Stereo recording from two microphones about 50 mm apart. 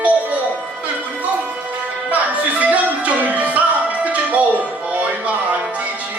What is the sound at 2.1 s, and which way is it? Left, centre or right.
Music, right.